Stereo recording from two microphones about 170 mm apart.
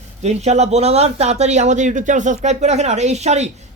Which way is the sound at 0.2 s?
40° right (ahead or behind).